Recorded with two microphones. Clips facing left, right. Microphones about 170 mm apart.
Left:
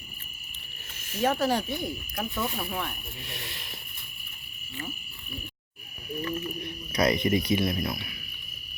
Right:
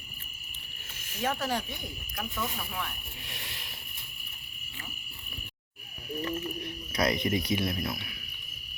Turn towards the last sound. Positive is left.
turn(degrees=10)  # may be behind; listen again after turning